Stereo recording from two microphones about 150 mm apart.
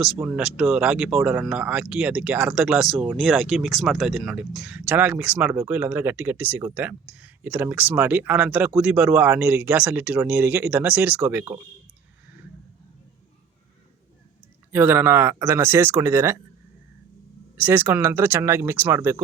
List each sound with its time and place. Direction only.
0.2 s speech: 5° right (ahead or behind)
14.7 s speech: 15° right (ahead or behind)
17.6 s speech: 15° right (ahead or behind)